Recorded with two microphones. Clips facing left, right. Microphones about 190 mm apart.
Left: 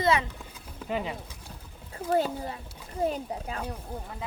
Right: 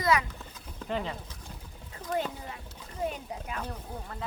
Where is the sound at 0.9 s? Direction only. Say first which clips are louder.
Left 2 dB; 10° left (ahead or behind).